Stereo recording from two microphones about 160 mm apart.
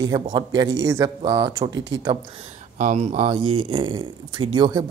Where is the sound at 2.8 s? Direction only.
50° right (ahead or behind); by 4.8 s 25° right (ahead or behind).